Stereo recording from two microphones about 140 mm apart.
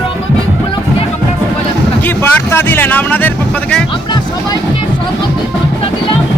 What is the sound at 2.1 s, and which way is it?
Vehicle, 15° left (ahead or behind).